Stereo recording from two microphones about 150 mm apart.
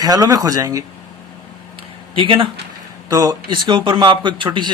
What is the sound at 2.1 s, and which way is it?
Speech, 35° right (ahead or behind).